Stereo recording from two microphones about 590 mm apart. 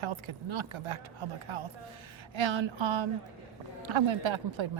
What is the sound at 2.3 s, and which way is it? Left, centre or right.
Speech, right.